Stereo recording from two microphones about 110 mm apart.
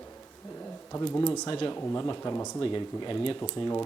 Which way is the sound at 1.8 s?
25° left (ahead or behind).